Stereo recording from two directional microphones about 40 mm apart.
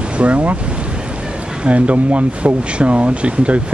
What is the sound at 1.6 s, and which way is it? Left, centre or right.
Speech, right.